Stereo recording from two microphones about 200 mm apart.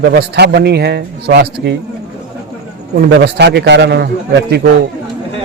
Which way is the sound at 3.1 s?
60° right (ahead or behind).